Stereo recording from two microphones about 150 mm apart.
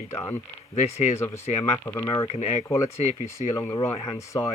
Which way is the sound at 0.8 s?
45° left (ahead or behind).